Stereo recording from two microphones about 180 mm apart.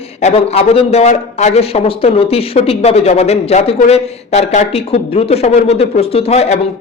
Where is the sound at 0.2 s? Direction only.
35° left (ahead or behind).